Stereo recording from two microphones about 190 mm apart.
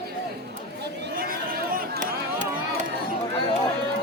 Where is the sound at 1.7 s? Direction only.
50° right (ahead or behind).